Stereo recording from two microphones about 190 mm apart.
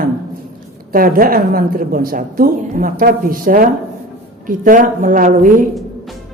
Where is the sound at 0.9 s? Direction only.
50° right (ahead or behind).